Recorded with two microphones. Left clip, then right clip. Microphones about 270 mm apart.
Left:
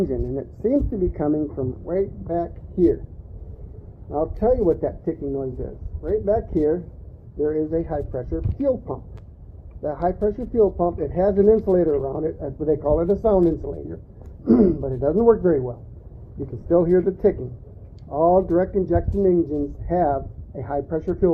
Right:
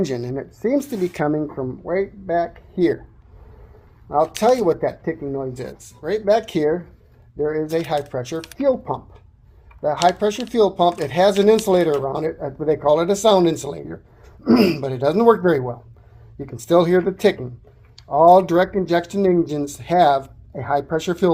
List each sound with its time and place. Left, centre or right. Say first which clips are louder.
0.0 s speech: right 1 dB; right
4.1 s speech: right 4 dB; centre